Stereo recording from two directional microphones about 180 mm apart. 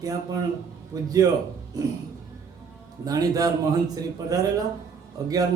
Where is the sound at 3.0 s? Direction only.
20° right (ahead or behind).